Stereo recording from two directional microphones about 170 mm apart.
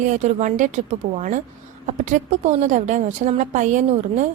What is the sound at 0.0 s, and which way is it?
A woman's voice, 45° right (ahead or behind).